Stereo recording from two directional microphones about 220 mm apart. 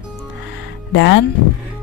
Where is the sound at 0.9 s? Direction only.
50° left (ahead or behind).